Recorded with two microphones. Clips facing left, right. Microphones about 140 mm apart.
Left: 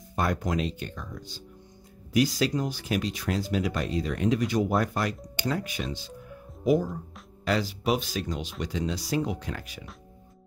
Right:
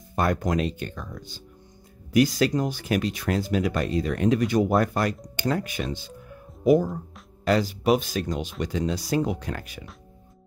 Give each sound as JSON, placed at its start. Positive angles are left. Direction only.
{"t": 0.1, "sound": "speech", "side_deg": -55}